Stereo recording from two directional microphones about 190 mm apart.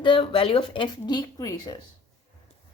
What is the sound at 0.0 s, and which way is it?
Speech, 25° left (ahead or behind).